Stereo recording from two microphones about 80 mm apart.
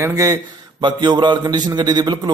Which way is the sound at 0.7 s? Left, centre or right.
Right.